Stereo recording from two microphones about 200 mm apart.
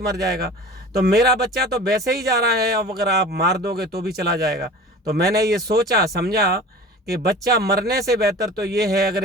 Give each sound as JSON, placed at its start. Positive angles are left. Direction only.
{"t": 0.0, "sound": "speech", "side_deg": -55}